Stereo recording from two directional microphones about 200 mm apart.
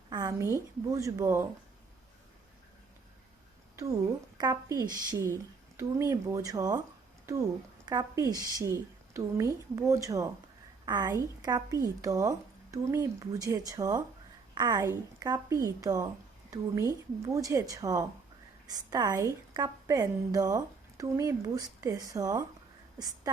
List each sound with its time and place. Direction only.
0.1 s speech: 15° right (ahead or behind)
4.4 s speech: 20° right (ahead or behind)
7.9 s speech: 20° right (ahead or behind)